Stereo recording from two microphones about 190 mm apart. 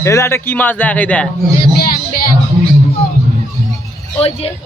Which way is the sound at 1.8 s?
50° left (ahead or behind).